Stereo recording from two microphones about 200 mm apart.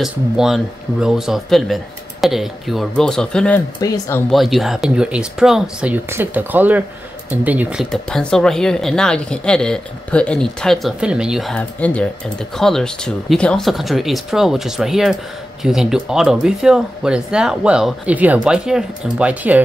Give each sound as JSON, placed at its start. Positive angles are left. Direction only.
{"t": 0.0, "sound": "speech", "side_deg": 0}
{"t": 3.8, "sound": "speech", "side_deg": 20}
{"t": 4.3, "sound": "speech", "side_deg": 0}